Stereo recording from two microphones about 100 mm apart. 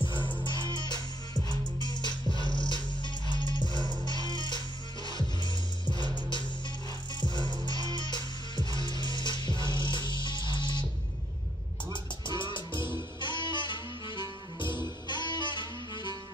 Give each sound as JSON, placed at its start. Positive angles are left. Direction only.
{"t": 0.0, "sound": "music", "side_deg": 55}
{"t": 7.8, "sound": "music", "side_deg": 50}
{"t": 11.9, "sound": "music", "side_deg": 50}